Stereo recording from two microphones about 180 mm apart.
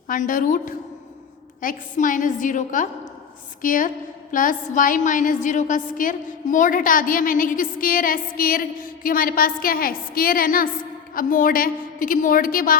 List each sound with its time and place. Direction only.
0.1 s a woman's voice: 45° left (ahead or behind)